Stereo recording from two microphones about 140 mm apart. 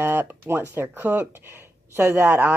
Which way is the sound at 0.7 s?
15° right (ahead or behind).